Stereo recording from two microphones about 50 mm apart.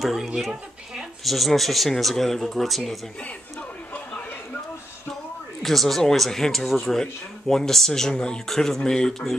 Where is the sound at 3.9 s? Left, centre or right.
Left.